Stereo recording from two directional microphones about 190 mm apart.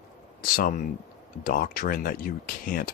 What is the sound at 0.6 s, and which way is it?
Speech, 45° left (ahead or behind).